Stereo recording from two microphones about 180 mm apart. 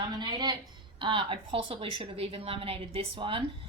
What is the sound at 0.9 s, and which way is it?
A woman's voice, 25° right (ahead or behind).